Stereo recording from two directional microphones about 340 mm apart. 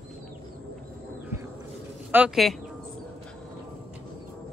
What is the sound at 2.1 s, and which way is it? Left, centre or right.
Speech, centre.